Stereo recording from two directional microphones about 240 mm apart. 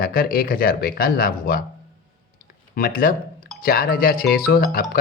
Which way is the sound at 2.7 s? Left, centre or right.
Left.